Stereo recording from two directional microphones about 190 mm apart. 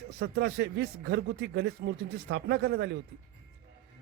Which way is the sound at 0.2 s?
60° right (ahead or behind).